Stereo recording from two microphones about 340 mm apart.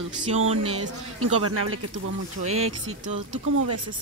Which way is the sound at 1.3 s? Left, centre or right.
Right.